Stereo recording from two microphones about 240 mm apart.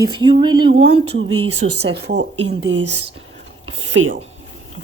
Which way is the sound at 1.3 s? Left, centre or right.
Right.